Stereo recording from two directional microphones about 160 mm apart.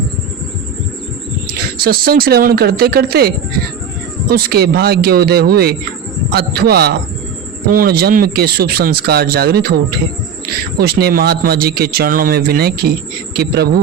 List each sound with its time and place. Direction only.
1.8 s a man's voice: 65° right (ahead or behind); by 6.9 s 85° right
7.7 s a man's voice: 65° right (ahead or behind); by 13.7 s 85° right